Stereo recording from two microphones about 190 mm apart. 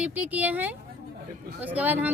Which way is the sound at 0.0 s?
10° right (ahead or behind).